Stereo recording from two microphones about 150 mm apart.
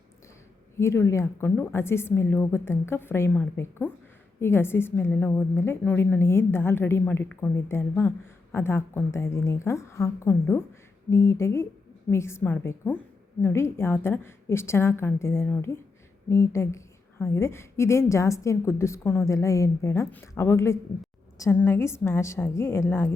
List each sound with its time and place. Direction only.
0.8 s a woman's voice: 20° left (ahead or behind)